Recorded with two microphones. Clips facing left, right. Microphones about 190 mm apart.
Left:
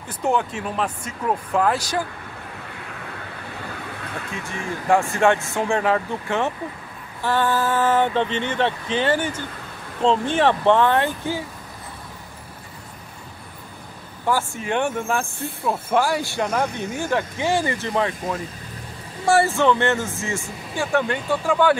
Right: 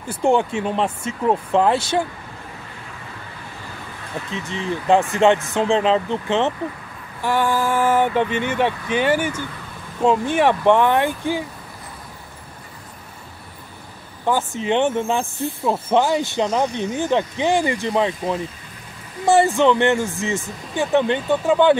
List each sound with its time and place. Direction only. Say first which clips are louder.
0.1 s speech: right 5 dB; 30° right (ahead or behind)
4.3 s speech: right 5 dB; 20° right (ahead or behind)
14.2 s speech: right 2 dB; 20° right (ahead or behind)